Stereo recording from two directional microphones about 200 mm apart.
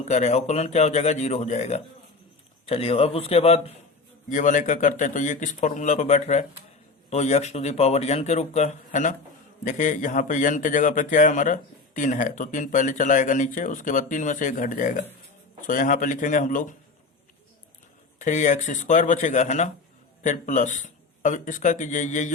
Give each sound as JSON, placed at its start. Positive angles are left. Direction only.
{"t": 0.0, "sound": "speech", "side_deg": 35}
{"t": 18.2, "sound": "speech", "side_deg": 35}